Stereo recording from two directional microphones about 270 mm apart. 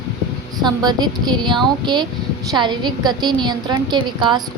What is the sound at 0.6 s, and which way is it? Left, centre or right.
A woman's voice, centre.